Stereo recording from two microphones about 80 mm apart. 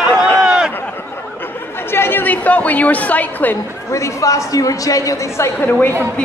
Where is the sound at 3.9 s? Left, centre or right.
Left.